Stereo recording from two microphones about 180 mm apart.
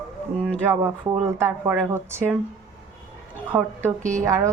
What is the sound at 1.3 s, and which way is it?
Speech, 15° right (ahead or behind).